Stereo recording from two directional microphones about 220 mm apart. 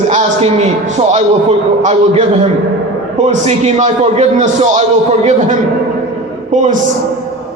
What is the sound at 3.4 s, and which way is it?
A man's voice, 30° right (ahead or behind).